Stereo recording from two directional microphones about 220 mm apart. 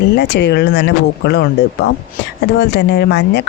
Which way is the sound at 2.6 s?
50° left (ahead or behind).